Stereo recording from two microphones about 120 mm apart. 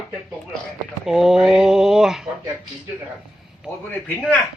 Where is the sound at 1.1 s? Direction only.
5° right (ahead or behind).